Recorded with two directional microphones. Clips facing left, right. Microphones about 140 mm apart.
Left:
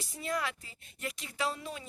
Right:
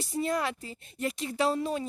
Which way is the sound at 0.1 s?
35° right (ahead or behind).